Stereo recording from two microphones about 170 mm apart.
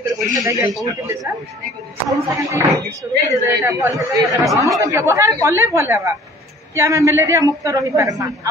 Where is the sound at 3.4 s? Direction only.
15° right (ahead or behind).